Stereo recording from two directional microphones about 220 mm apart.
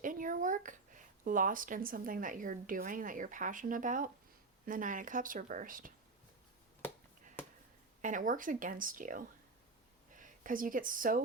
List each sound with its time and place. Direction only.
0.0 s speech: 35° right (ahead or behind)
6.8 s finger snapping: 10° left (ahead or behind)
8.0 s speech: 35° right (ahead or behind)